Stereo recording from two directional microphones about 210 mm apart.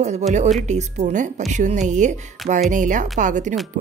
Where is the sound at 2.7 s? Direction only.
40° right (ahead or behind).